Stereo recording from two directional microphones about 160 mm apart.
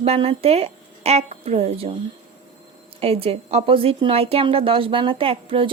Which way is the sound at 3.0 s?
40° right (ahead or behind).